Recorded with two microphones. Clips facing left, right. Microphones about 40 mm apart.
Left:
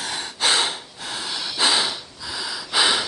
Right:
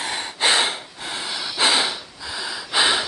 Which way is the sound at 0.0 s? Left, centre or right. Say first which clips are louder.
Right 2 dB; centre.